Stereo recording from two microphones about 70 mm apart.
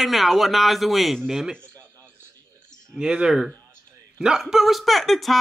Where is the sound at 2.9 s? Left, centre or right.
Centre.